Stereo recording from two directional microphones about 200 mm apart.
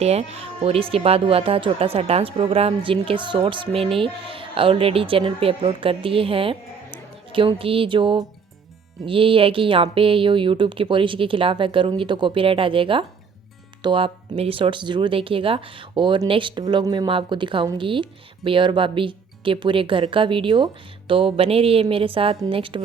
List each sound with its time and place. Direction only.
0.0 s speech: 30° right (ahead or behind)